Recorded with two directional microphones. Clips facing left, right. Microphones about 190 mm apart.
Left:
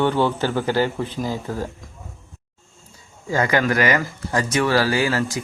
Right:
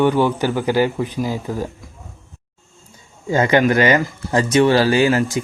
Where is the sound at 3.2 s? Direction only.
25° right (ahead or behind).